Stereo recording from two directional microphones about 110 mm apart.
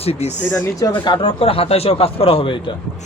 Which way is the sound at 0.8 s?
45° left (ahead or behind).